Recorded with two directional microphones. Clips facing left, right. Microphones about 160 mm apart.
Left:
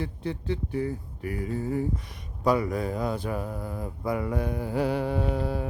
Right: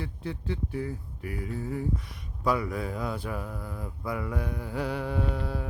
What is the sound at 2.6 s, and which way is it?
Speech, 40° left (ahead or behind).